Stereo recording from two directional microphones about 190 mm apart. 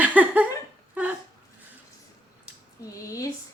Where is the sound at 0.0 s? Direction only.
10° right (ahead or behind).